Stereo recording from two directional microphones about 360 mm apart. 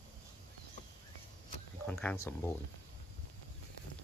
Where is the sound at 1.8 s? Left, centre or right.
Centre.